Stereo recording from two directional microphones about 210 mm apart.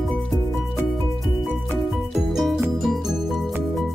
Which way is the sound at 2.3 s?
Centre (ahead or behind).